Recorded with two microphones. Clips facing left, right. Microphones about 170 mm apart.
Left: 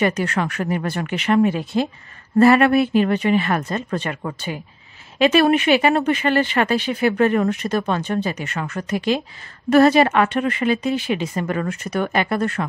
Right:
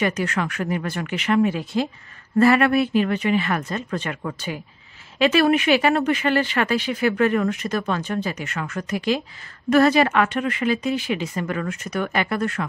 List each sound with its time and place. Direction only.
0.0 s speech: 35° left (ahead or behind)